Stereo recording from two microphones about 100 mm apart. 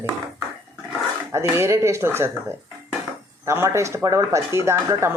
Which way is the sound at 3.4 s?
25° right (ahead or behind).